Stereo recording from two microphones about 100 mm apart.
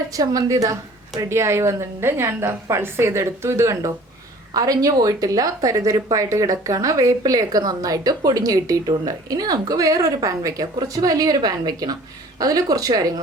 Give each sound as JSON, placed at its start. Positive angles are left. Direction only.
{"t": 0.1, "sound": "a woman's voice", "side_deg": -40}